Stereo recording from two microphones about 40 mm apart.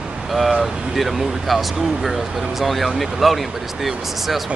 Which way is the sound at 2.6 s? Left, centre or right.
Centre.